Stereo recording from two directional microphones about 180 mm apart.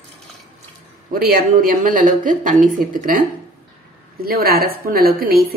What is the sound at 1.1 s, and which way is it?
A woman's voice, 55° right (ahead or behind).